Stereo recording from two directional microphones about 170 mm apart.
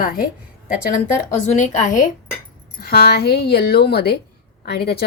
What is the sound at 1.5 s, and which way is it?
Speech, 45° left (ahead or behind).